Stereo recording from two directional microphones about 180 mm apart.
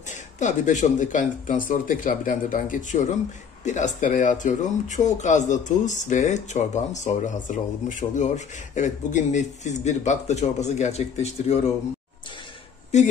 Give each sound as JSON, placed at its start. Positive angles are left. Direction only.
{"t": 0.1, "sound": "a man's voice", "side_deg": 40}
{"t": 12.9, "sound": "a man's voice", "side_deg": 40}